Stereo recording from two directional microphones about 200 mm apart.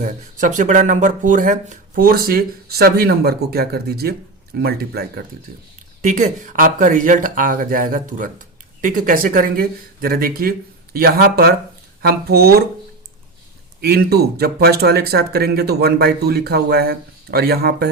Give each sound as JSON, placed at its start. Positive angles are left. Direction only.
{"t": 0.0, "sound": "speech", "side_deg": -40}
{"t": 6.0, "sound": "speech", "side_deg": -40}
{"t": 13.8, "sound": "speech", "side_deg": -50}